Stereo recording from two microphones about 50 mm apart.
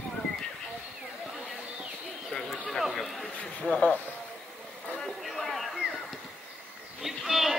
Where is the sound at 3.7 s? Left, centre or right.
Left.